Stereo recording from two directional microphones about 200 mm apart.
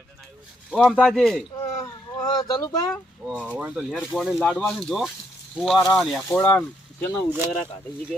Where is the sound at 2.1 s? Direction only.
20° left (ahead or behind).